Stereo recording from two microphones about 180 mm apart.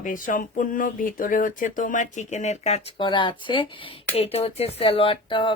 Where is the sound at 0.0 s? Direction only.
45° left (ahead or behind).